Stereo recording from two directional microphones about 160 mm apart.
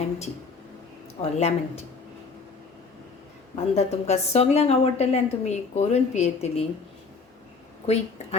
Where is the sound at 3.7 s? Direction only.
40° left (ahead or behind).